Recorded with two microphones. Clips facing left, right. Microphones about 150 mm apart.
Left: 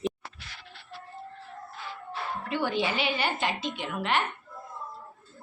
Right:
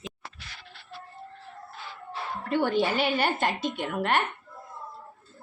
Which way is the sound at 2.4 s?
50° right (ahead or behind).